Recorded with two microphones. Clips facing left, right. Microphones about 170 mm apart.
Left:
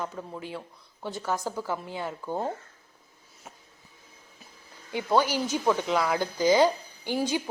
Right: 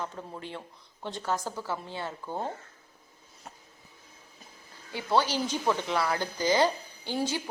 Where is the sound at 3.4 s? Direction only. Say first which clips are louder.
Even; centre (ahead or behind).